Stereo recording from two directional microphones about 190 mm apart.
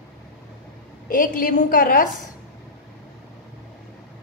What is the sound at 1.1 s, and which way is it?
Speech, 45° left (ahead or behind).